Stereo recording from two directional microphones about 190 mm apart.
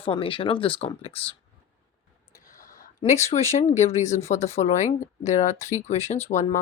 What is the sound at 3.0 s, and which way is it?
Speech, 35° left (ahead or behind).